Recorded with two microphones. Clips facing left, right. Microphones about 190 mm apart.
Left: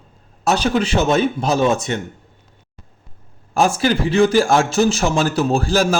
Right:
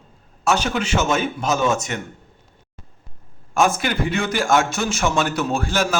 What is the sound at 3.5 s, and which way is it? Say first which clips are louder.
A man's voice: left 3 dB; 35° left (ahead or behind).